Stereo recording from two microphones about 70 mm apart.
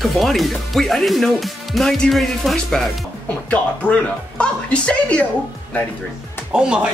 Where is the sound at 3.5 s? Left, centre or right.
Centre.